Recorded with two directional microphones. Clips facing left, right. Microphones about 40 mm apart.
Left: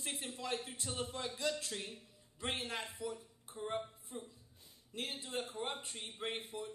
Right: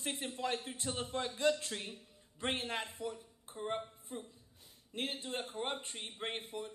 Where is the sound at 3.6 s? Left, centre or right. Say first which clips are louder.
Right 1 dB; right.